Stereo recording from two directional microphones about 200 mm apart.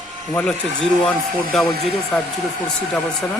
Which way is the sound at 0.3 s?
5° left (ahead or behind).